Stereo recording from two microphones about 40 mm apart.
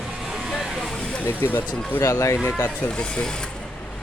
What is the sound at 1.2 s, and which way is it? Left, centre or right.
Speech, left.